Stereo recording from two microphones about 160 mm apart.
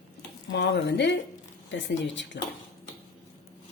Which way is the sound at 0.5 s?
90° left.